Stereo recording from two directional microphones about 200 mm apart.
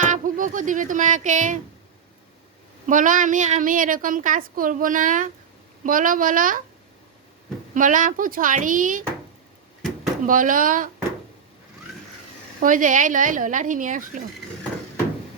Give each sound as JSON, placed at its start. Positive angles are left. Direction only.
{"t": 0.0, "sound": "speech", "side_deg": -40}
{"t": 2.8, "sound": "a woman's voice", "side_deg": -40}
{"t": 7.7, "sound": "a woman's voice", "side_deg": -40}
{"t": 10.2, "sound": "speech", "side_deg": -40}
{"t": 12.5, "sound": "a woman's voice", "side_deg": -40}